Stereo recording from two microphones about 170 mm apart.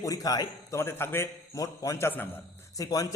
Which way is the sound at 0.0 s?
20° left (ahead or behind).